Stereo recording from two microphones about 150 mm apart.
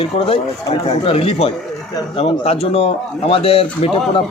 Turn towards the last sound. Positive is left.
turn(degrees=40)  # may be behind; listen again after turning